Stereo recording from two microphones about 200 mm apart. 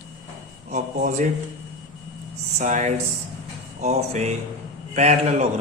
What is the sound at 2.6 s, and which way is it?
Speech, 35° right (ahead or behind).